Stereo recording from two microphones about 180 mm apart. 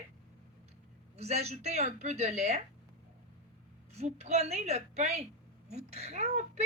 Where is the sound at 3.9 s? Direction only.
35° right (ahead or behind).